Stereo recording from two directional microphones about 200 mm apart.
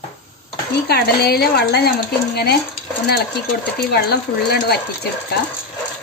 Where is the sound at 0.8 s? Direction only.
55° left (ahead or behind).